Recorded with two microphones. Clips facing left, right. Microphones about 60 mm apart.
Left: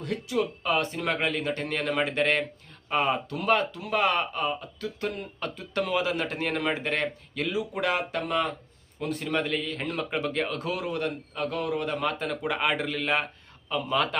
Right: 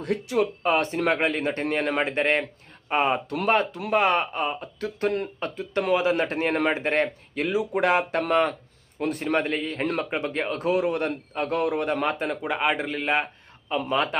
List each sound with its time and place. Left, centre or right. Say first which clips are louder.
0.0 s speech: right 4 dB; right
5.4 s speech: right 3 dB; right
9.2 s speech: right 3 dB; right
10.1 s speech: right 1 dB; right
10.6 s speech: right 6 dB; right
12.5 s speech: right 1 dB; centre